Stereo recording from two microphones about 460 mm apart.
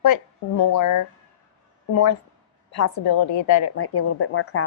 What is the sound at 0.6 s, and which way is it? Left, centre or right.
Speech, left.